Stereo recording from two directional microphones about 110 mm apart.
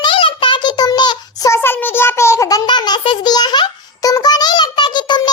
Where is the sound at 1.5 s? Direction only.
20° left (ahead or behind); by 5.3 s 40° left (ahead or behind).